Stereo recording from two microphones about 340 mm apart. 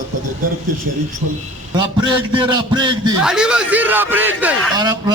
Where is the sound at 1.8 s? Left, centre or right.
Centre.